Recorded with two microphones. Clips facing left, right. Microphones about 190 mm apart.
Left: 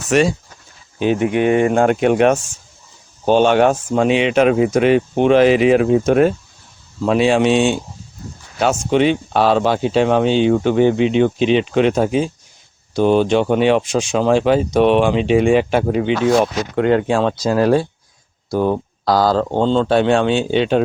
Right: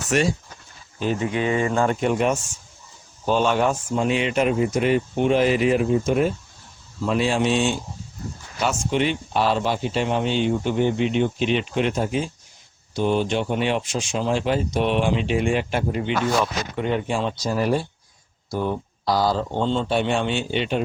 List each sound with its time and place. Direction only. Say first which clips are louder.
0.1 s speech: left 6 dB; 90° left
0.9 s speech: left 7 dB; 70° left (ahead or behind)
7.0 s speech: left 7 dB; 75° left (ahead or behind); by 12.1 s 90° left
12.9 s speech: left 8 dB; 80° left